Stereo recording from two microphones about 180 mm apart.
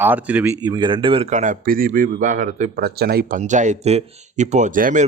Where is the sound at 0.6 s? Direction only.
25° right (ahead or behind); by 3.4 s 55° right (ahead or behind).